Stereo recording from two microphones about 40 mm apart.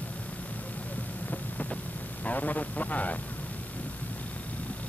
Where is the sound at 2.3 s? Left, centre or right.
Left.